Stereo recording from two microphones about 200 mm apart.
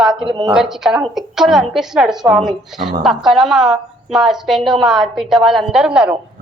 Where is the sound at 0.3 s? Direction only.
20° right (ahead or behind).